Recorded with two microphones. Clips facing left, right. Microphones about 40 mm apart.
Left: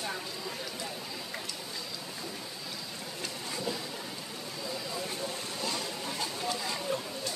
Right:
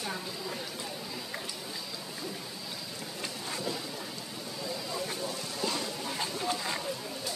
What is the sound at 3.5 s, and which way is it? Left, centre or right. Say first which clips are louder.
Boat: left 1 dB; centre.